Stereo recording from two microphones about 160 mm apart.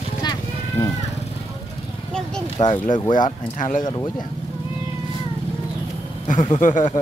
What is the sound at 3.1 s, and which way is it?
Speech, 55° left (ahead or behind).